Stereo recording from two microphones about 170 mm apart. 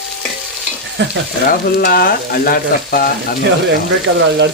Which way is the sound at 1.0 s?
90° right.